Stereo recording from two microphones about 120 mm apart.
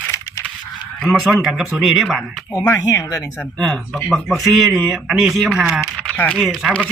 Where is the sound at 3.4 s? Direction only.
5° left (ahead or behind).